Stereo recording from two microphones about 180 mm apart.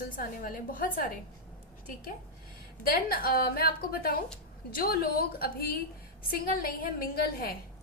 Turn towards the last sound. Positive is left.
turn(degrees=55)  # may be behind; listen again after turning